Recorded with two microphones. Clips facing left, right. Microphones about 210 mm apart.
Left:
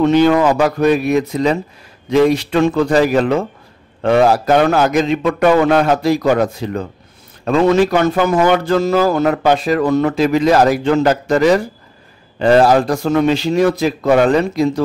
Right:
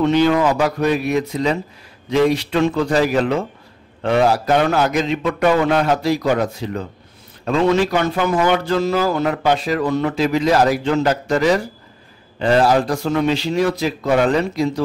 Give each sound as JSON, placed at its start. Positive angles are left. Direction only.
{"t": 0.0, "sound": "speech", "side_deg": 45}